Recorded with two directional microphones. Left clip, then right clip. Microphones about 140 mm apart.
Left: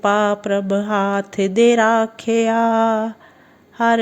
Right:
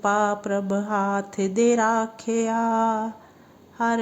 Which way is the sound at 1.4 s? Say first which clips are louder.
Left 7 dB; centre (ahead or behind).